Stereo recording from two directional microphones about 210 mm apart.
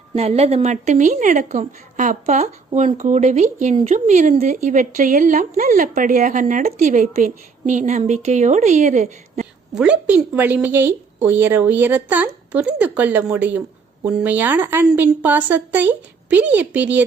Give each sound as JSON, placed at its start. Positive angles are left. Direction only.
{"t": 0.2, "sound": "a woman's voice", "side_deg": -30}
{"t": 9.7, "sound": "a woman's voice", "side_deg": -5}